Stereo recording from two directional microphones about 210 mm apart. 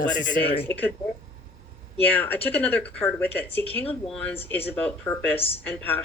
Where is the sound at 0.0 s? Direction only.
25° left (ahead or behind).